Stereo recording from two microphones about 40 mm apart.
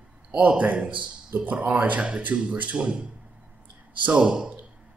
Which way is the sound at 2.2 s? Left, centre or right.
Right.